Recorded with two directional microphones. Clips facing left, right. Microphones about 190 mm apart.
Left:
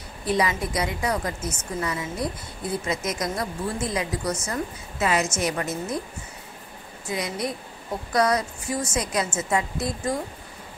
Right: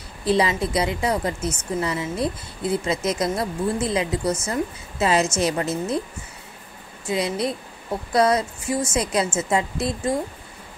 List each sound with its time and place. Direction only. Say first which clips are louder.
0.3 s speech: right 4 dB; 25° right (ahead or behind)
7.1 s speech: right 5 dB; 25° right (ahead or behind)